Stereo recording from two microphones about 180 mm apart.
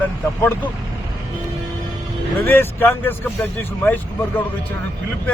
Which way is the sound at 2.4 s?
10° left (ahead or behind).